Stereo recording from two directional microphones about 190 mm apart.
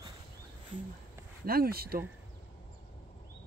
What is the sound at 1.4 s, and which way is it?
Speech, 50° right (ahead or behind).